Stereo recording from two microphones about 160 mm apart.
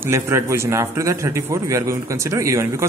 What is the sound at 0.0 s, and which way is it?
A man's voice, 15° right (ahead or behind).